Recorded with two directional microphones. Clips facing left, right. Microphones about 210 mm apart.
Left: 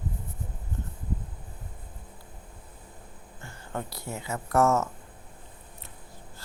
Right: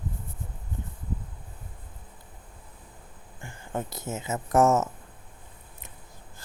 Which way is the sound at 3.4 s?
15° right (ahead or behind).